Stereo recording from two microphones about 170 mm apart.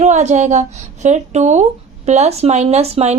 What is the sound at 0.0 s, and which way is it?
Speech, 45° right (ahead or behind).